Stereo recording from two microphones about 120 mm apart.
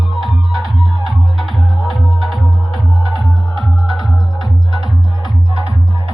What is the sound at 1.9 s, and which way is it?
Music, centre (ahead or behind).